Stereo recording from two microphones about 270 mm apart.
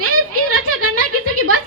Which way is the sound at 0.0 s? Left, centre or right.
Right.